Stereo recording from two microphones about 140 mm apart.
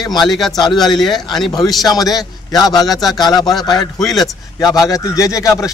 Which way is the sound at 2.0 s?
25° left (ahead or behind).